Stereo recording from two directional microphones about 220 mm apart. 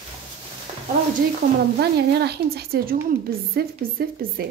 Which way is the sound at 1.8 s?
50° right (ahead or behind).